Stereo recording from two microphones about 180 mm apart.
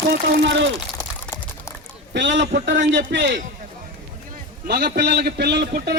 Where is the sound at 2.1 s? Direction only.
80° right.